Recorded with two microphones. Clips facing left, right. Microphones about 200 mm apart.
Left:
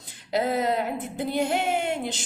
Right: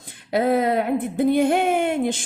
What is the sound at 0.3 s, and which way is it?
A woman's voice, 55° right (ahead or behind).